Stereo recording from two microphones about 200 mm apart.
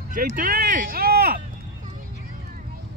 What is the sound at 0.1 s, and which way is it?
Speech, 45° right (ahead or behind).